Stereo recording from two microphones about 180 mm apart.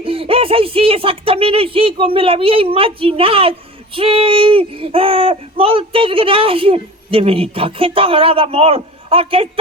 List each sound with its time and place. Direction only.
0.0 s speech: 30° right (ahead or behind)